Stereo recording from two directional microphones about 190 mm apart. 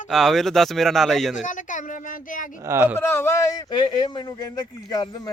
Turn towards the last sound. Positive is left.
turn(degrees=20)  # may be behind; listen again after turning